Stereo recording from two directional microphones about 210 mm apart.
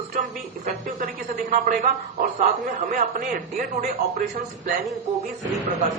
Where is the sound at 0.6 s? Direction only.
40° right (ahead or behind).